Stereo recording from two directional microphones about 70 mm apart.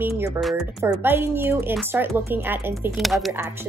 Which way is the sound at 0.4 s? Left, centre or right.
Centre.